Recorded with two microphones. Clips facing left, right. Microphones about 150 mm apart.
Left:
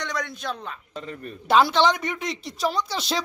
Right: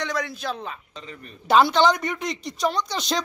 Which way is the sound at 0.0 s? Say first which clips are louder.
Right 2 dB; 5° right (ahead or behind).